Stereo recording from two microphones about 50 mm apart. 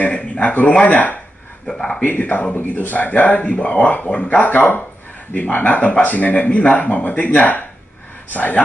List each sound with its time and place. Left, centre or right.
0.1 s speech: left
1.7 s speech: centre
2.0 s speech: left
4.5 s speech: left